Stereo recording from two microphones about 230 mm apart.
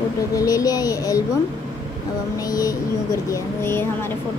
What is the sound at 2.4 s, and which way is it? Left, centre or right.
Speech, centre.